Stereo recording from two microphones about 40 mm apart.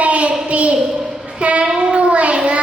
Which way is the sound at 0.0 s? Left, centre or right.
Right.